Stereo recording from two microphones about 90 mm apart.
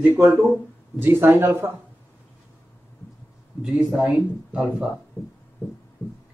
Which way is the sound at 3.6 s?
10° right (ahead or behind).